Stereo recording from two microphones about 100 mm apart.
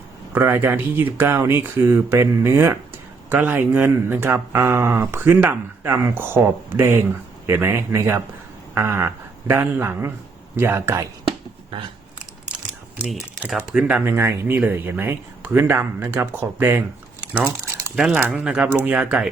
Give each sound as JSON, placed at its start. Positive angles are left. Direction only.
{"t": 0.3, "sound": "speech", "side_deg": -20}
{"t": 13.7, "sound": "speech", "side_deg": -10}
{"t": 14.0, "sound": "speech", "side_deg": -25}
{"t": 18.1, "sound": "speech", "side_deg": -10}